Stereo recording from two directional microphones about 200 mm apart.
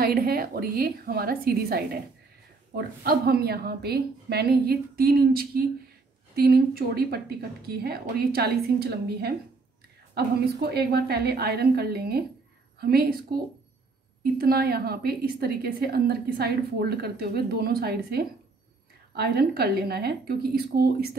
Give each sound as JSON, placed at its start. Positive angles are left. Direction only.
{"t": 0.0, "sound": "a woman's voice", "side_deg": -50}
{"t": 14.4, "sound": "a woman's voice", "side_deg": -50}